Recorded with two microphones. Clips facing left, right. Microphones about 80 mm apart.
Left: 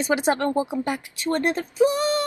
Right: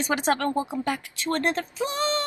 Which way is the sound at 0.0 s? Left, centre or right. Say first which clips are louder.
Left 3 dB; centre.